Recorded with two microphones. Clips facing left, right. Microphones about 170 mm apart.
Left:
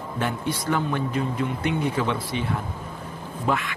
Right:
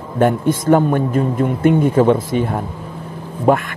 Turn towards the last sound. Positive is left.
turn(degrees=-50)  # may be behind; listen again after turning